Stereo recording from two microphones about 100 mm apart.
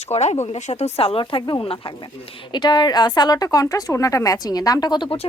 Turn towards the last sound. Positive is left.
turn(degrees=50)  # may be behind; listen again after turning